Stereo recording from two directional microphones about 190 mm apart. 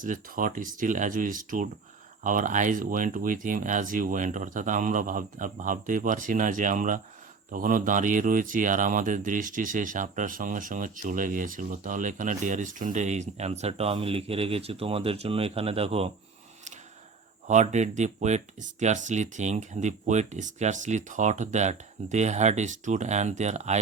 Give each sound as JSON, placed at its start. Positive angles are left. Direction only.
{"t": 0.0, "sound": "speech", "side_deg": -45}
{"t": 17.5, "sound": "speech", "side_deg": -40}